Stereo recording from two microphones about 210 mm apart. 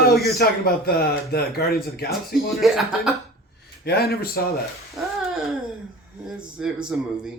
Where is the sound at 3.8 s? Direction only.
50° left (ahead or behind).